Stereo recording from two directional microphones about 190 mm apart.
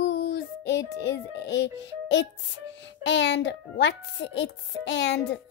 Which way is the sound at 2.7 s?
70° left (ahead or behind).